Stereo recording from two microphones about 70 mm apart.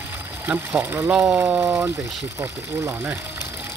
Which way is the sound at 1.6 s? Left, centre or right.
Right.